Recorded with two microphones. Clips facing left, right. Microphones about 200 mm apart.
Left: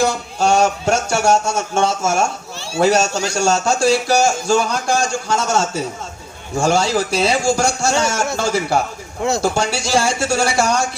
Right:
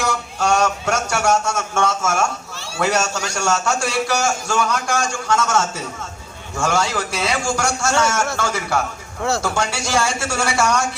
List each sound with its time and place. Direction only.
0.0 s a man's voice: 30° left (ahead or behind)